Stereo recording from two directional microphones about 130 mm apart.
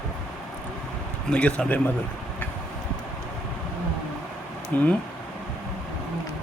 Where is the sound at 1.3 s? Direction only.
10° left (ahead or behind).